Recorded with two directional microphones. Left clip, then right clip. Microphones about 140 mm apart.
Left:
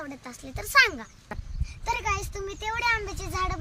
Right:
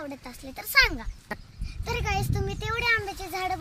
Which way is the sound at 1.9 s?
60° right (ahead or behind).